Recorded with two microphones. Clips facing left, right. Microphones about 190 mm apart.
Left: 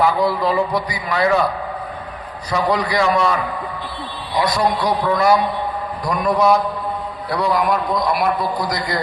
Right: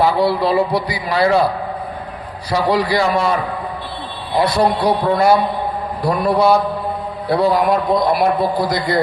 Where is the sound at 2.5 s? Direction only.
30° right (ahead or behind).